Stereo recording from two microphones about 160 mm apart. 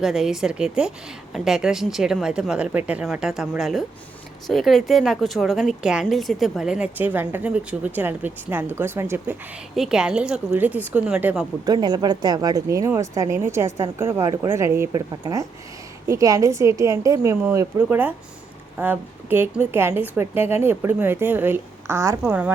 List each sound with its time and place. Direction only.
0.0 s a woman's voice: centre (ahead or behind)
9.7 s a woman's voice: 5° right (ahead or behind)
11.6 s a woman's voice: 25° right (ahead or behind)